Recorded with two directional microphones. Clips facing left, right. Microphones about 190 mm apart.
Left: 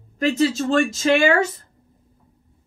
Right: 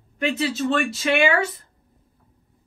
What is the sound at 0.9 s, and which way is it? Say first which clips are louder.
Speech: left 3 dB; 45° left (ahead or behind).